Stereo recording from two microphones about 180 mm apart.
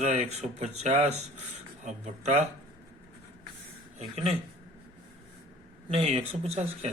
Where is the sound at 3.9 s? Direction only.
35° right (ahead or behind).